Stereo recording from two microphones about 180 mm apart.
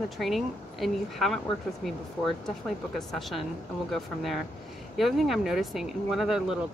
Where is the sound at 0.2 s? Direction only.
Centre (ahead or behind).